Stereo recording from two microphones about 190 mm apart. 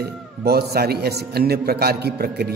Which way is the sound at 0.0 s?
55° right (ahead or behind).